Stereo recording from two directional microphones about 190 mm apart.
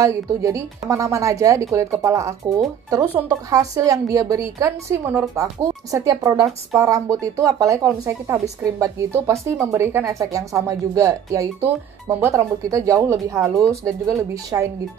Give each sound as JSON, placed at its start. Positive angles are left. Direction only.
{"t": 0.0, "sound": "speech", "side_deg": -15}